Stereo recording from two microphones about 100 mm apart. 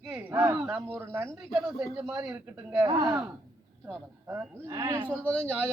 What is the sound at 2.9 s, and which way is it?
Speech, 30° right (ahead or behind).